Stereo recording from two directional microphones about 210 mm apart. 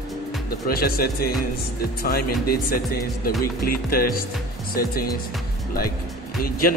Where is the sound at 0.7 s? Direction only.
45° left (ahead or behind).